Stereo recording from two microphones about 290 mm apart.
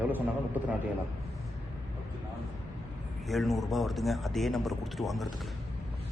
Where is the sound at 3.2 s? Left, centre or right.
Centre.